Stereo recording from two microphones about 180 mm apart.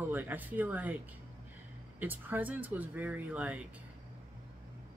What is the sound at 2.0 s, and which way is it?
Speech, 10° right (ahead or behind).